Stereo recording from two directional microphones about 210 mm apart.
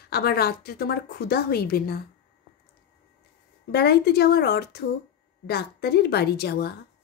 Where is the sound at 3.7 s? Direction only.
50° left (ahead or behind).